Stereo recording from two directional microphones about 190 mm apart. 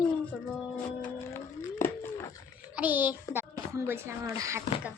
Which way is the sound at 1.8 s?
10° left (ahead or behind).